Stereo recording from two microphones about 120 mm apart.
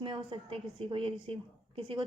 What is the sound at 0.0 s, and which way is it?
A woman's voice, 45° right (ahead or behind).